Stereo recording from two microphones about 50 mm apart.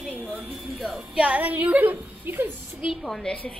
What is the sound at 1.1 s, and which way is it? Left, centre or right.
A woman's voice, right.